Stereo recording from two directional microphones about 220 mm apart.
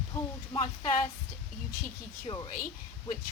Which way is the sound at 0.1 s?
20° left (ahead or behind).